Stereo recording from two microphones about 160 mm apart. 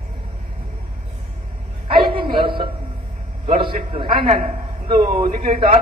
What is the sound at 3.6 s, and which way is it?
A man's voice, 30° right (ahead or behind).